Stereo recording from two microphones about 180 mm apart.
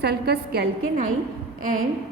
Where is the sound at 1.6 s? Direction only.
50° right (ahead or behind).